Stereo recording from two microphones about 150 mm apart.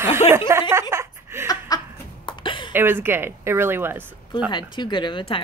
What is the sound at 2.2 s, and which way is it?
Cough, 35° left (ahead or behind).